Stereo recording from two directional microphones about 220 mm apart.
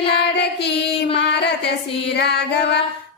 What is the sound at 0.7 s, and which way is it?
Child singing, 25° left (ahead or behind).